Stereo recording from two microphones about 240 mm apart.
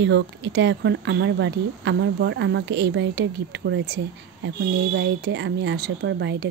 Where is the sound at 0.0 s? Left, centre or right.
Right.